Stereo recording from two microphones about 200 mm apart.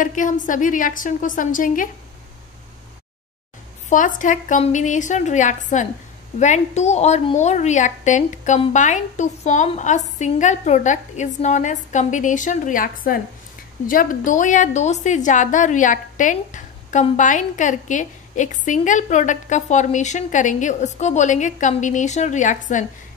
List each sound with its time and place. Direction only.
0.0 s a woman's voice: 40° left (ahead or behind)
3.9 s a woman's voice: 40° left (ahead or behind)